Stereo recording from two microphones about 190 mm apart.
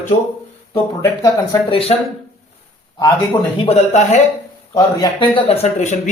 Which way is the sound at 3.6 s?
35° left (ahead or behind).